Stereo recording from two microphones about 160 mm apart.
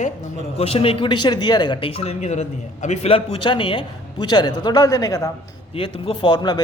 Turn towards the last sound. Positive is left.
turn(degrees=30)  # may be behind; listen again after turning